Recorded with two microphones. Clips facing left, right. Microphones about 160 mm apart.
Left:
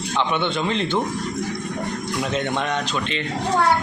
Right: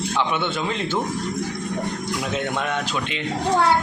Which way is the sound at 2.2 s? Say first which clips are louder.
Left 3 dB; 5° right (ahead or behind).